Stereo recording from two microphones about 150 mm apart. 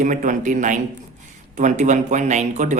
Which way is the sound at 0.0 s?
60° right (ahead or behind).